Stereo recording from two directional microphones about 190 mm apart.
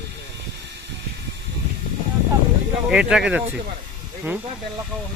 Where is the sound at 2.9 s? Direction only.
5° right (ahead or behind).